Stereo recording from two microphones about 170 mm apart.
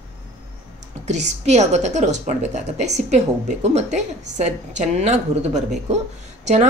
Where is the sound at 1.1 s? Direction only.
45° right (ahead or behind).